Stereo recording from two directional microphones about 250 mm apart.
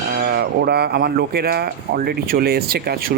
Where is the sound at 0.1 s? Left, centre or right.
Right.